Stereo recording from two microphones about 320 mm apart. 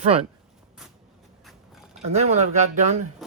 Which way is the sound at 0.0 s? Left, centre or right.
Centre.